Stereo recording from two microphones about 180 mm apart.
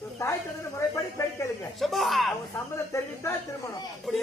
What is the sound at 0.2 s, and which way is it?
Snake, 15° left (ahead or behind).